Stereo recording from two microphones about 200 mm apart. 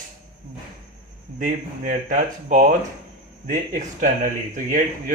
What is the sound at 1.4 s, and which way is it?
Speech, 40° right (ahead or behind).